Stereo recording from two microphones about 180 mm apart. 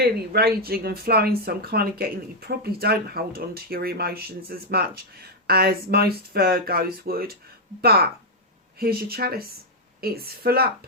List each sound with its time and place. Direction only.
0.0 s speech: 55° right (ahead or behind)